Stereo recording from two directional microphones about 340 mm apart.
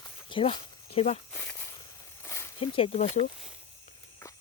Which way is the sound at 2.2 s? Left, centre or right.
Centre.